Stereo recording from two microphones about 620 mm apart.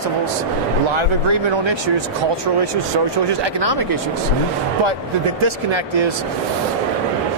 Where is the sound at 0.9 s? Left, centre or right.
Right.